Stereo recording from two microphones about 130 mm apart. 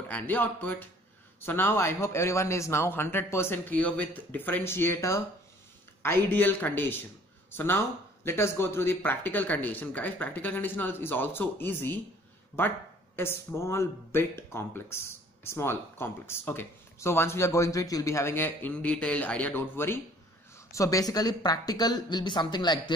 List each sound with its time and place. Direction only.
0.1 s speech: 15° left (ahead or behind); by 22.9 s 35° left (ahead or behind)